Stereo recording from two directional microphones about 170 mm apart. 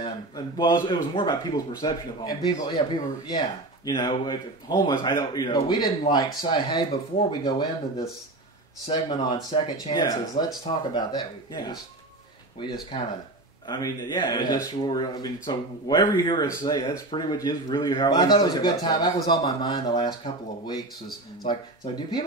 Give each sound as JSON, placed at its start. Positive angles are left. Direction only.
{"t": 0.0, "sound": "a man's voice", "side_deg": 25}
{"t": 13.7, "sound": "speech", "side_deg": 25}
{"t": 21.5, "sound": "speech", "side_deg": 25}